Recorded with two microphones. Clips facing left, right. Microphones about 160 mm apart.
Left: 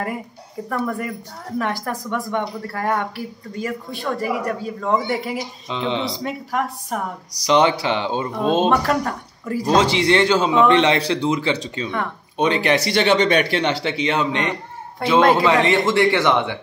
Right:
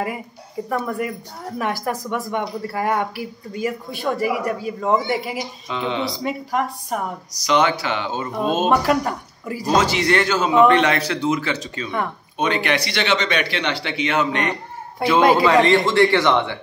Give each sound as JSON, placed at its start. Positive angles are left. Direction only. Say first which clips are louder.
{"t": 0.7, "sound": "speech", "louder": "even", "side_deg": -5}
{"t": 5.7, "sound": "a man's voice", "louder": "left 1 dB", "side_deg": 25}
{"t": 6.2, "sound": "speech", "louder": "right 1 dB", "side_deg": -5}
{"t": 7.4, "sound": "a man's voice", "louder": "left 2 dB", "side_deg": 30}
{"t": 8.6, "sound": "speech", "louder": "right 1 dB", "side_deg": -5}
{"t": 9.8, "sound": "a man's voice", "louder": "left 2 dB", "side_deg": 25}